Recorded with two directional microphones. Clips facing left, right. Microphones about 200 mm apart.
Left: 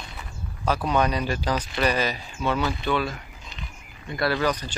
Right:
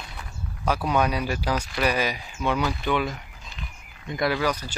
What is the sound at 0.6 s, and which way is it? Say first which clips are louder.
Speech: even; 10° right (ahead or behind).